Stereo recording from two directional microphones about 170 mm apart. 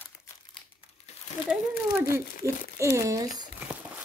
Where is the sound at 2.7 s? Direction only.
20° right (ahead or behind).